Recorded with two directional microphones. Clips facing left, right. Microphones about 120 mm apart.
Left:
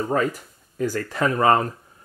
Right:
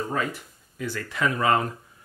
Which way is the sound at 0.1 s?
40° left (ahead or behind).